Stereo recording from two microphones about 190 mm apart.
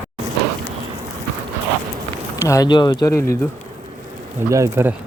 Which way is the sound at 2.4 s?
20° left (ahead or behind).